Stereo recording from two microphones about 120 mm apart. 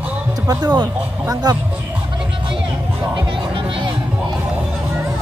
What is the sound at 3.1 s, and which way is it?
Music, 40° right (ahead or behind).